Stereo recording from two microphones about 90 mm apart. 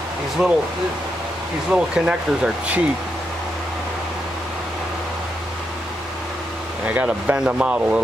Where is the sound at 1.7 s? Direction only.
10° right (ahead or behind).